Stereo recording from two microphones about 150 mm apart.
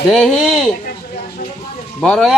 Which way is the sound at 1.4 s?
80° left.